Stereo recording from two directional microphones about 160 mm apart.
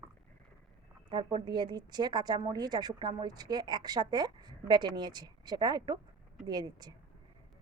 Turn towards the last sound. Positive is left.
turn(degrees=-25)  # may be behind; listen again after turning